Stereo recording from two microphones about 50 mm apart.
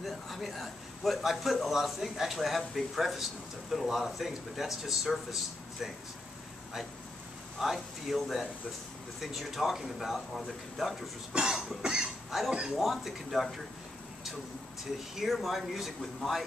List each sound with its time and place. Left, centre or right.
0.0 s a man's voice: centre
7.5 s a man's voice: centre
11.3 s cough: centre
12.7 s a man's voice: centre
15.3 s a man's voice: centre